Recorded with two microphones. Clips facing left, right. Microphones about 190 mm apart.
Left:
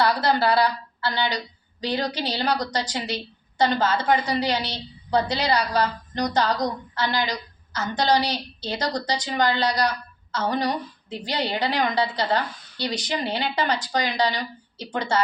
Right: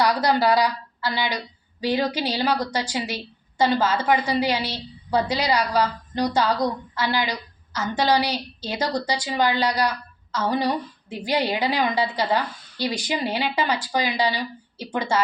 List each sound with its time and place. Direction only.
0.0 s a woman's voice: 15° right (ahead or behind)